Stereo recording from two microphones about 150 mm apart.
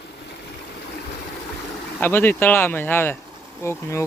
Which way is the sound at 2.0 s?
15° left (ahead or behind).